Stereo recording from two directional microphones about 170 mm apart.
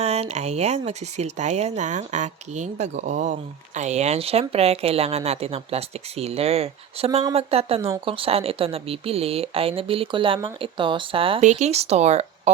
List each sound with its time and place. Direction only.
0.0 s a woman's voice: 40° right (ahead or behind)